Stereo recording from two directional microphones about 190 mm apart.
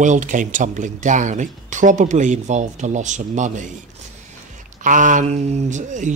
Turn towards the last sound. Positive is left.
turn(degrees=-40)  # may be behind; listen again after turning